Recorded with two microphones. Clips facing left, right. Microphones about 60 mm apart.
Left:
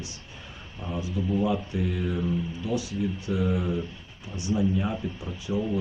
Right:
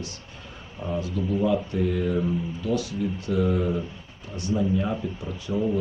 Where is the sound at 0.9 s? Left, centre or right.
Centre.